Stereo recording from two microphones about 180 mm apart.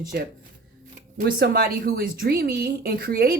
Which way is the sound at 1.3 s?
60° right (ahead or behind).